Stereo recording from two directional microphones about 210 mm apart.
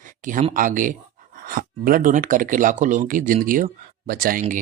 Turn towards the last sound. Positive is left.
turn(degrees=-40)  # may be behind; listen again after turning